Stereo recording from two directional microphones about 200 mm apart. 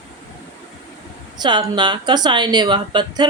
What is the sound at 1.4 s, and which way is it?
A woman's voice, 20° right (ahead or behind).